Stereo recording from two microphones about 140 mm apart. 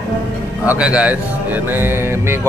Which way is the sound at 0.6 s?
10° right (ahead or behind).